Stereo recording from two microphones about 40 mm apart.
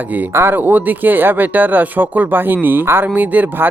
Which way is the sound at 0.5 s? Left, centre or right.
Right.